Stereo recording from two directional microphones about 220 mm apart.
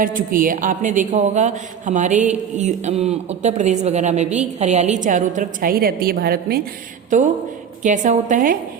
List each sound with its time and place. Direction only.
0.0 s speech: 40° right (ahead or behind)
7.8 s speech: 35° right (ahead or behind)